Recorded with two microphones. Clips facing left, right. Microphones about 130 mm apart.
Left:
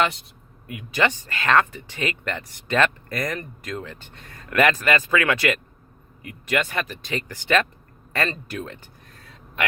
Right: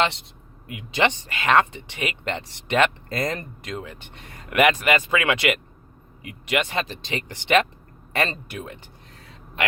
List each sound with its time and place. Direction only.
0.0 s speech: 25° right (ahead or behind); by 8.8 s 10° right (ahead or behind)